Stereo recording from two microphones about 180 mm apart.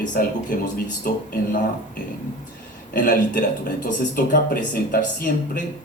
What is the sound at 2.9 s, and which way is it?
Speech, 50° left (ahead or behind).